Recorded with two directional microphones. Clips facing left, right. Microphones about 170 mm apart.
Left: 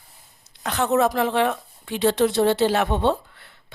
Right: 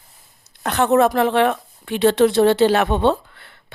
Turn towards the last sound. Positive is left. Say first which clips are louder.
# right 3 dB
turn(degrees=-70)  # may be behind; listen again after turning